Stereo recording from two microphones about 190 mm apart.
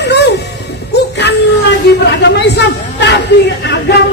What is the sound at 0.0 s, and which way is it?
Music, 60° left (ahead or behind).